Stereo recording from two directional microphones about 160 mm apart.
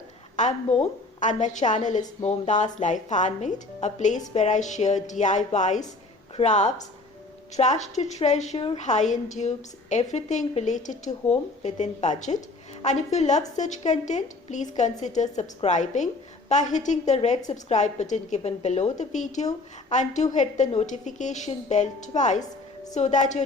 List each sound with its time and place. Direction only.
0.4 s a woman's voice: 50° left (ahead or behind)